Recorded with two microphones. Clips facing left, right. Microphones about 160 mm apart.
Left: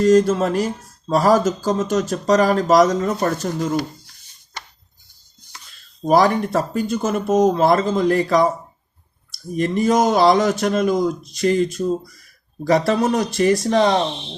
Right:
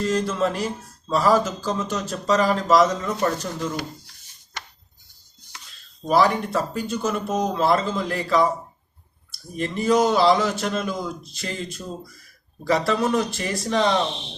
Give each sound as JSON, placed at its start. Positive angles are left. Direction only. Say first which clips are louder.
{"t": 0.0, "sound": "speech", "louder": "left 8 dB", "side_deg": 50}
{"t": 6.1, "sound": "speech", "louder": "left 4 dB", "side_deg": 45}
{"t": 9.6, "sound": "speech", "louder": "left 3 dB", "side_deg": 45}